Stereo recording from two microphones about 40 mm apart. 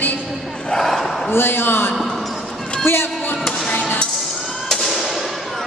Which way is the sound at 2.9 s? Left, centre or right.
Left.